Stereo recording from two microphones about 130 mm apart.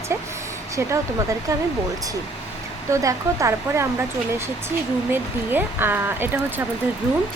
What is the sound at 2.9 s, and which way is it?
Speech, 25° right (ahead or behind).